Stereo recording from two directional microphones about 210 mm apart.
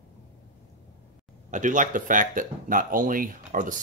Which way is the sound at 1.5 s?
40° right (ahead or behind).